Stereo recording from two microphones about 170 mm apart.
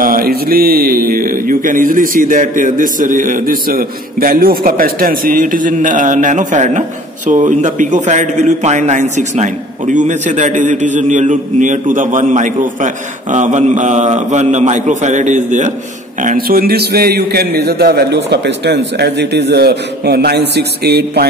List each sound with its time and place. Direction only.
0.0 s a man's voice: 60° right (ahead or behind)
16.3 s a man's voice: 60° right (ahead or behind)